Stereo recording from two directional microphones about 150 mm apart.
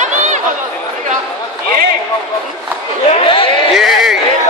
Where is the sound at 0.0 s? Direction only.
55° right (ahead or behind).